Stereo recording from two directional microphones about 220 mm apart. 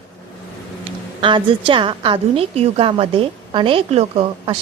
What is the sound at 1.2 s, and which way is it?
A woman's voice, 20° right (ahead or behind).